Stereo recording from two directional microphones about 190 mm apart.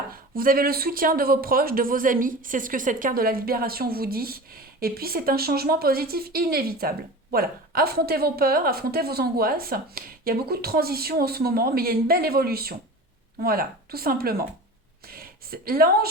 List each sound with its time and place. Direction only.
0.1 s a woman's voice: 50° right (ahead or behind)